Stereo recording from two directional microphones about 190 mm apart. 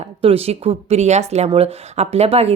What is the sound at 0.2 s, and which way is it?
A woman's voice, 30° right (ahead or behind).